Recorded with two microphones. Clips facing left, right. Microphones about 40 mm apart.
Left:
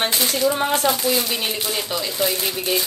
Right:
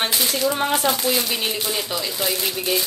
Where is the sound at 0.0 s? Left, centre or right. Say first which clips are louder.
Left 1 dB; centre.